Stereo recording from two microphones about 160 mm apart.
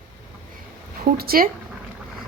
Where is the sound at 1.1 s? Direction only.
70° right (ahead or behind).